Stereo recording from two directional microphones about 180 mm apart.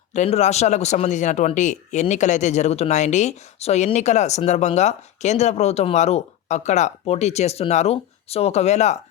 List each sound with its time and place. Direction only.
0.1 s speech: 40° left (ahead or behind)